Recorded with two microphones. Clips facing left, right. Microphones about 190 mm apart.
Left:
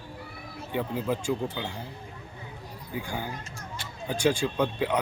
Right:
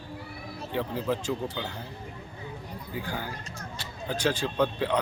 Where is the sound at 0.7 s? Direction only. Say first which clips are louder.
Even; 10° left (ahead or behind).